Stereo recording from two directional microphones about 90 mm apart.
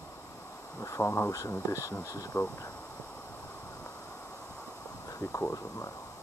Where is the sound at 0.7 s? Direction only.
35° left (ahead or behind).